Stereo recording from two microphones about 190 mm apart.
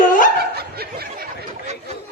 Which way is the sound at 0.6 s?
55° right (ahead or behind).